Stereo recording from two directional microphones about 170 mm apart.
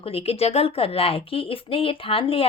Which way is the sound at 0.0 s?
35° left (ahead or behind).